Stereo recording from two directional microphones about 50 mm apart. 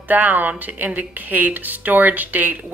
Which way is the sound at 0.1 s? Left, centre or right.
Right.